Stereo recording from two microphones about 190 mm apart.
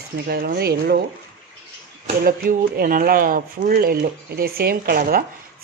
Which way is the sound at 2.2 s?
50° right (ahead or behind).